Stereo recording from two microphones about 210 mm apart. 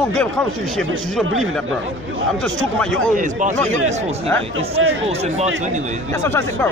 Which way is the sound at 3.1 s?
40° right (ahead or behind).